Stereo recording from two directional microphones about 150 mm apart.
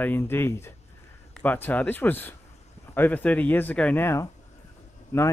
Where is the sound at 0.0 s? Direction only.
15° left (ahead or behind).